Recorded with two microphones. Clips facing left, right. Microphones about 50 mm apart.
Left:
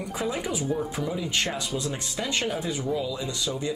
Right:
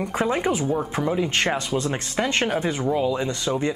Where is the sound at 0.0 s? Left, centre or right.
Right.